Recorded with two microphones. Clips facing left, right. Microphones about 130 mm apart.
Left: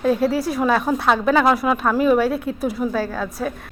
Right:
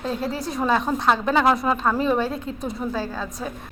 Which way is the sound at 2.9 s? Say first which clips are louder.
Left 5 dB; 15° right (ahead or behind).